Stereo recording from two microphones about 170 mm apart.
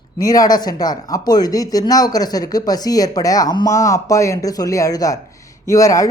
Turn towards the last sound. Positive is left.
turn(degrees=20)  # may be behind; listen again after turning